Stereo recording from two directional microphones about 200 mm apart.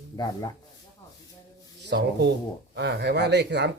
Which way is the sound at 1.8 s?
55° right (ahead or behind).